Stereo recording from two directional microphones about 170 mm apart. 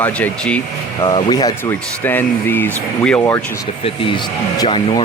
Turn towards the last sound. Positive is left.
turn(degrees=25)  # may be behind; listen again after turning